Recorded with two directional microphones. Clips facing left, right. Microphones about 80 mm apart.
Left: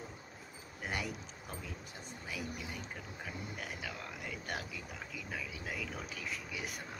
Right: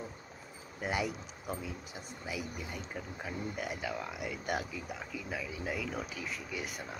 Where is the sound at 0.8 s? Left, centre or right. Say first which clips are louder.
Right 6 dB; centre.